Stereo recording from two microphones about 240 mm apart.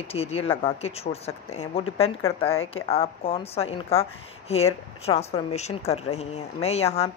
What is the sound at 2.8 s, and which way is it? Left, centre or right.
A woman's voice, left.